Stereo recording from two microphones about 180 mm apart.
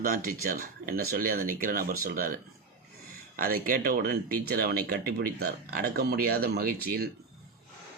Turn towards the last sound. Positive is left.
turn(degrees=-55)  # may be behind; listen again after turning